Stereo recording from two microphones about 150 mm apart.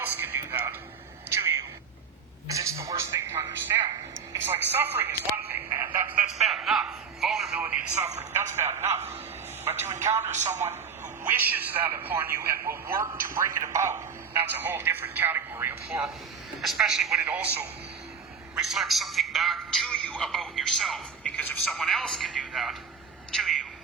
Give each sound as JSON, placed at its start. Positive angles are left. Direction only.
{"t": 0.0, "sound": "a sound", "side_deg": -15}
{"t": 2.5, "sound": "a man's voice", "side_deg": -20}
{"t": 6.3, "sound": "a man's voice", "side_deg": 0}
{"t": 10.3, "sound": "a man's voice", "side_deg": -50}
{"t": 10.6, "sound": "a man's voice", "side_deg": -15}
{"t": 16.6, "sound": "a man's voice", "side_deg": 0}
{"t": 23.3, "sound": "a sound", "side_deg": 0}